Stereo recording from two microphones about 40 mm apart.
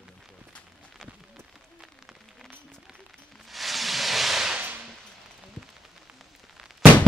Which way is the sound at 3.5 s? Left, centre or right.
Centre.